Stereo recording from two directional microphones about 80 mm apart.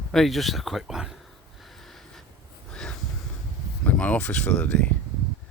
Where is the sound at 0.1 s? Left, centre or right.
Centre.